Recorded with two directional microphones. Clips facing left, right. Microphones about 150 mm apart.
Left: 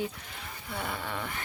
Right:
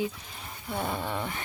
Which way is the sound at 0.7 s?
20° right (ahead or behind).